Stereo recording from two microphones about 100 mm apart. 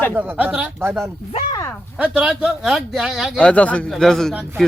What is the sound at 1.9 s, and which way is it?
Speech, 15° right (ahead or behind).